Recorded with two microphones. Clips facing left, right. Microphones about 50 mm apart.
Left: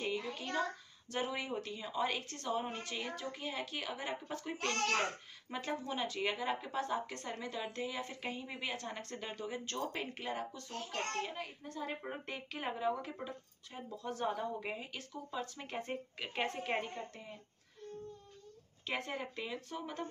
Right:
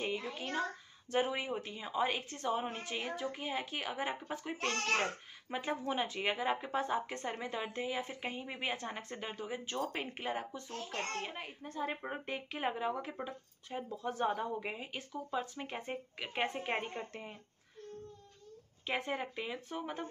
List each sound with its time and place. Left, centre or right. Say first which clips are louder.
0.0 s a woman's voice: right 1 dB; right
16.9 s speech: right 2 dB; right
18.9 s a woman's voice: right 3 dB; centre